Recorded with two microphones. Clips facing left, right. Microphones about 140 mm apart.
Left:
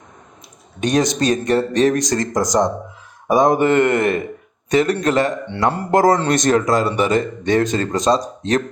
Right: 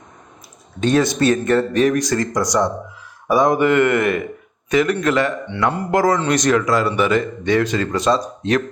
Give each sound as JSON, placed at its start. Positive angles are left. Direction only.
{"t": 0.8, "sound": "speech", "side_deg": 15}
{"t": 1.7, "sound": "a man's voice", "side_deg": 30}
{"t": 3.2, "sound": "a man's voice", "side_deg": 25}